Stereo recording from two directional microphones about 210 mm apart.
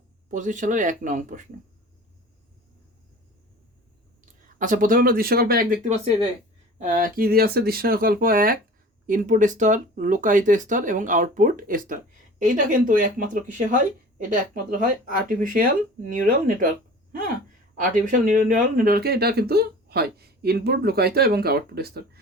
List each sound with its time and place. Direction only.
0.3 s speech: 35° right (ahead or behind)
4.5 s speech: 40° right (ahead or behind)
15.0 s speech: 40° right (ahead or behind)